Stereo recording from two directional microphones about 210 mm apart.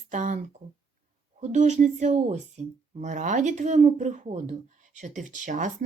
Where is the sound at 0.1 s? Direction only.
35° right (ahead or behind).